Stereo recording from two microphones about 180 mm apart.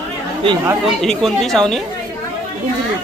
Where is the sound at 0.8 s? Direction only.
Centre (ahead or behind).